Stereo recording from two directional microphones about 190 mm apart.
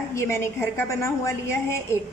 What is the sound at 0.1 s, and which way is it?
A woman's voice, 15° left (ahead or behind).